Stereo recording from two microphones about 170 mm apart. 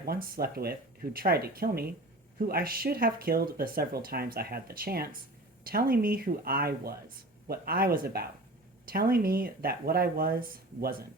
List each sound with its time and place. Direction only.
0.0 s speech: 60° right (ahead or behind)